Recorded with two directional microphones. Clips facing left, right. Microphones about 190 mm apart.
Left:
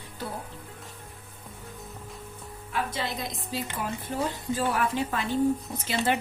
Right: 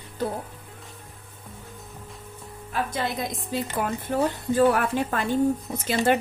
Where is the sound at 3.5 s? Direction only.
55° right (ahead or behind).